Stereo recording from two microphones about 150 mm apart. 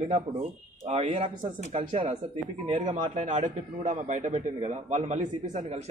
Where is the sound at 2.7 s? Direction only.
55° right (ahead or behind).